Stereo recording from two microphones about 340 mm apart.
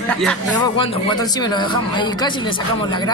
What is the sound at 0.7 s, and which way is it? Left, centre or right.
A man's voice, centre.